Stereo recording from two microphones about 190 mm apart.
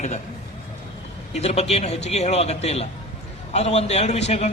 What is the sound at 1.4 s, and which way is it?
A man's voice, 35° left (ahead or behind).